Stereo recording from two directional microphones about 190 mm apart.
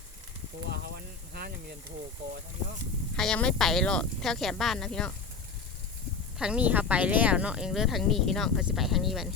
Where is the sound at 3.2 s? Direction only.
5° left (ahead or behind).